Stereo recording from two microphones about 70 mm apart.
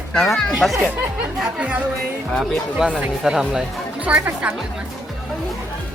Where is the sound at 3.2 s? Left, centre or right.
Centre.